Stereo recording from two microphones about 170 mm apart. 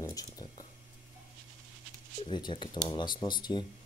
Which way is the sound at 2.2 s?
25° left (ahead or behind).